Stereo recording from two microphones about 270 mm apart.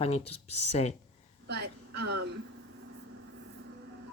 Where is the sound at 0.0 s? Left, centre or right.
Left.